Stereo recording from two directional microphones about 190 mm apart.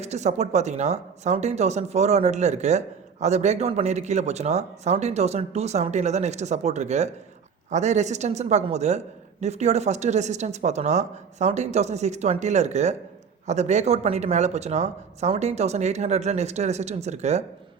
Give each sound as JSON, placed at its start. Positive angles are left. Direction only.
{"t": 0.0, "sound": "speech", "side_deg": -35}